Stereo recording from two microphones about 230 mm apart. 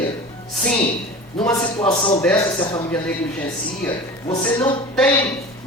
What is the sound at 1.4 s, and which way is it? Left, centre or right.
Speech, centre.